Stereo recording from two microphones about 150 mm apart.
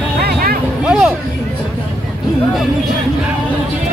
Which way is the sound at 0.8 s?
5° right (ahead or behind).